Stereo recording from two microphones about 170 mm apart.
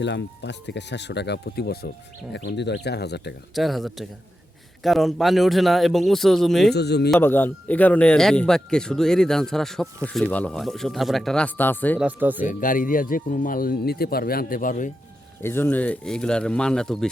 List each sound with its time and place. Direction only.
0.0 s speech: 90° left; by 1.9 s 70° left (ahead or behind)
2.3 s speech: 85° left
3.5 s speech: centre (ahead or behind)
6.7 s speech: 75° left (ahead or behind)
7.2 s speech: 10° left (ahead or behind)
11.9 s speech: 10° right (ahead or behind)
12.5 s speech: 50° left (ahead or behind)
15.4 s speech: 15° left (ahead or behind)